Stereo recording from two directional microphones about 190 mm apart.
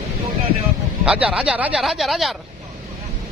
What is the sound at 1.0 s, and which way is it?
Speech, 5° right (ahead or behind).